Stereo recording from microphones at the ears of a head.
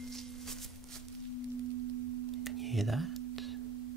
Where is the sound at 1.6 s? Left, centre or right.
Right.